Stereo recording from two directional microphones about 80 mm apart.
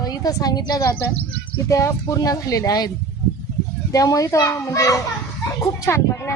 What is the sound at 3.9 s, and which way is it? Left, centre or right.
Speech, left.